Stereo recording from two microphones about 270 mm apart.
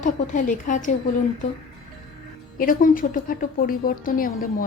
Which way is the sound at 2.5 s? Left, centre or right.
Left.